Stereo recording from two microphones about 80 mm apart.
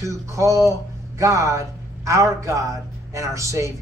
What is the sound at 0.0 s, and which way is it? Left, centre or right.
Speech, right.